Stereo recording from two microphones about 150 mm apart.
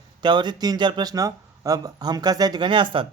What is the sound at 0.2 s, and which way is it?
Speech, 30° right (ahead or behind).